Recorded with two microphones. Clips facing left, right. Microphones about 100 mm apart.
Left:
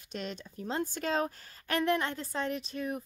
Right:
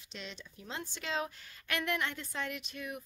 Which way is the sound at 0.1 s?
45° left (ahead or behind).